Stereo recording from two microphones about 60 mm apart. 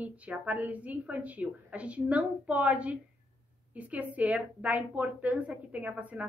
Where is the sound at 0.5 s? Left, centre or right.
Right.